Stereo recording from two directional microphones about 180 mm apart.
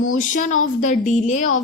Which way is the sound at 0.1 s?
45° left (ahead or behind).